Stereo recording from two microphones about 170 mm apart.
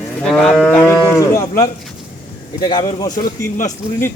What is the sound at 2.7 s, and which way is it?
Speech, 20° left (ahead or behind).